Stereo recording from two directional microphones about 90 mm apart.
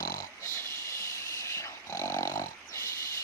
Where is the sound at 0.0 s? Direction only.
40° left (ahead or behind).